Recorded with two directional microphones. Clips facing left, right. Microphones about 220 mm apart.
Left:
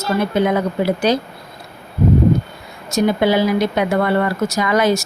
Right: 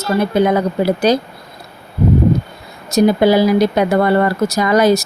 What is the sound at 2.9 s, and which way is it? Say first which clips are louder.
Speech: right 4 dB; 35° right (ahead or behind).